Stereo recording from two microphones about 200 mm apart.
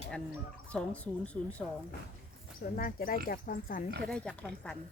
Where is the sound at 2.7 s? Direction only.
45° left (ahead or behind).